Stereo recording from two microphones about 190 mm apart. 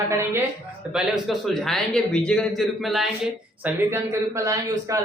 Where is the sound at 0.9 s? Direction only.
Centre (ahead or behind).